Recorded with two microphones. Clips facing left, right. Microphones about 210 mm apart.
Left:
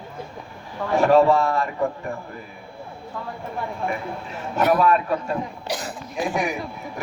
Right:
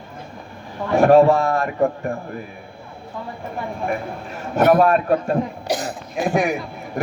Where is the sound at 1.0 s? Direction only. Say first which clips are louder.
Right 4 dB; 50° right (ahead or behind).